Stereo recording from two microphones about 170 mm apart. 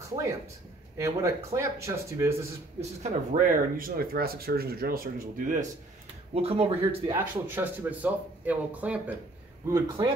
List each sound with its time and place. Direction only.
0.9 s speech: 15° right (ahead or behind)
2.8 s speech: 45° right (ahead or behind)
6.3 s speech: 35° right (ahead or behind)
7.2 s speech: 10° right (ahead or behind)